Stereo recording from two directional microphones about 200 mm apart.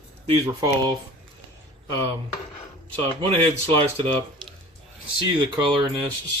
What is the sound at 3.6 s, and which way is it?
Speech, 25° right (ahead or behind).